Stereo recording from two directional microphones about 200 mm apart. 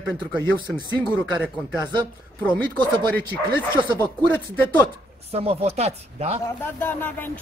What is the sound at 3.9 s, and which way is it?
Speech, 10° left (ahead or behind).